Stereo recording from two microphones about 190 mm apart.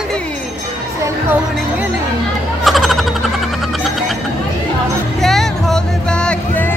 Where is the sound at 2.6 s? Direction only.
Centre (ahead or behind).